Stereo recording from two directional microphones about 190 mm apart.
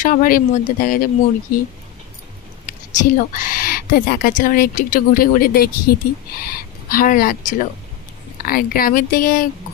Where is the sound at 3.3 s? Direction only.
45° left (ahead or behind).